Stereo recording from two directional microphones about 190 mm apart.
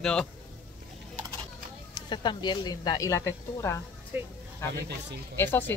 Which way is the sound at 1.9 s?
25° left (ahead or behind).